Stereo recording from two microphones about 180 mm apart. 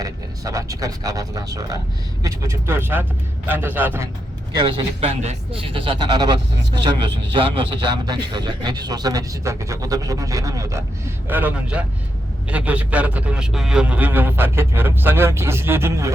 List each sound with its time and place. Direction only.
0.0 s a man's voice: 20° right (ahead or behind)
4.5 s a man's voice: 25° right (ahead or behind)